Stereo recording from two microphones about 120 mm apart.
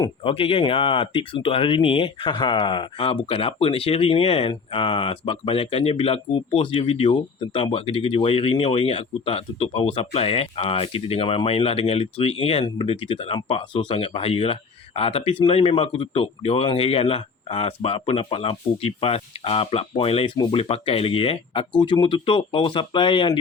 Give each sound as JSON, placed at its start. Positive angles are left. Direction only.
{"t": 0.0, "sound": "speech", "side_deg": 50}
{"t": 20.3, "sound": "speech", "side_deg": 35}
{"t": 20.6, "sound": "speech", "side_deg": 50}